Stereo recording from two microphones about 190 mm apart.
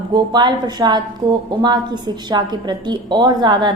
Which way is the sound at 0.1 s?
25° right (ahead or behind).